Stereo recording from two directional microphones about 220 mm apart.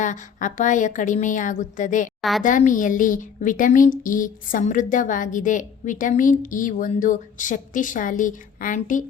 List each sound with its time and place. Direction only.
0.0 s a woman's voice: 35° left (ahead or behind)